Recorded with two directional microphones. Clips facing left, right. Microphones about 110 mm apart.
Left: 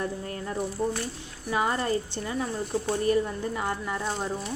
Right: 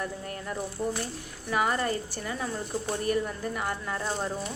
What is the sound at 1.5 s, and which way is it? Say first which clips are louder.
Speech: left 1 dB; 25° left (ahead or behind).